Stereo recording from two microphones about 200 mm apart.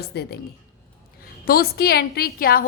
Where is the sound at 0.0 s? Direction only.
55° left (ahead or behind).